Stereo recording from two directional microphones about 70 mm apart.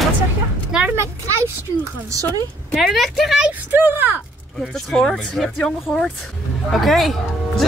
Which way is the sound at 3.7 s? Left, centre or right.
Right.